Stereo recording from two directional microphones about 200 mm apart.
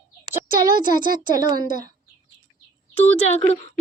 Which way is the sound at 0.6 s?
45° right (ahead or behind).